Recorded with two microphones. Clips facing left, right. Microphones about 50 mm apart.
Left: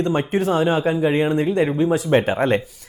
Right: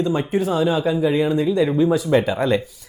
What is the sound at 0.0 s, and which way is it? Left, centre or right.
Speech, left.